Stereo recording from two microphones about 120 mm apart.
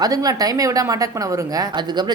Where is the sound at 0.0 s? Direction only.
30° right (ahead or behind).